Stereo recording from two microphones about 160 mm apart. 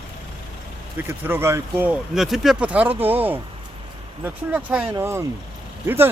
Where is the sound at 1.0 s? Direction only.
10° right (ahead or behind).